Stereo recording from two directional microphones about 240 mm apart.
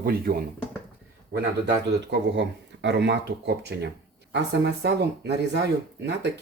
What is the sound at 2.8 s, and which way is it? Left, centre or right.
Speech, right.